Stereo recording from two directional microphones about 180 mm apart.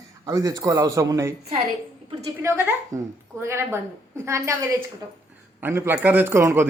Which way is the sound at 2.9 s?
20° right (ahead or behind).